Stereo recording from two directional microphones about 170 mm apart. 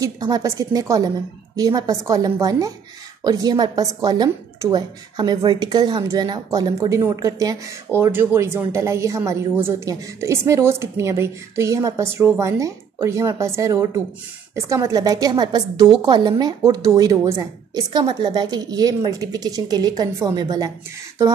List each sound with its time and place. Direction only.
0.0 s a woman's voice: 20° right (ahead or behind)